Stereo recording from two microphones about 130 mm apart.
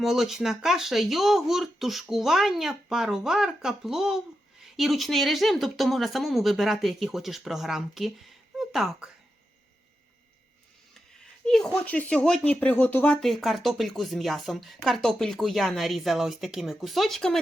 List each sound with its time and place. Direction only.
0.0 s speech: centre (ahead or behind)
8.5 s a sound: centre (ahead or behind)
11.4 s speech: 5° left (ahead or behind)
13.1 s speech: centre (ahead or behind)